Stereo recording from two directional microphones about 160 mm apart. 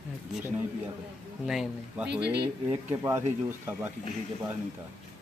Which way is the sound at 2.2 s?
90° right.